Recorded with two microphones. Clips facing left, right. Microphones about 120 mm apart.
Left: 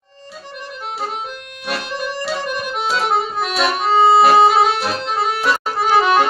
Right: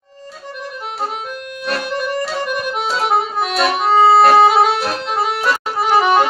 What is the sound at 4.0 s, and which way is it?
Music, 15° left (ahead or behind).